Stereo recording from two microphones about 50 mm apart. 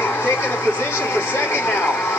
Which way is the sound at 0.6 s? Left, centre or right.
Left.